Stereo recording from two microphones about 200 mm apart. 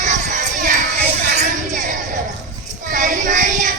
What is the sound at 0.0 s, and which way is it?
Child singing, 35° right (ahead or behind).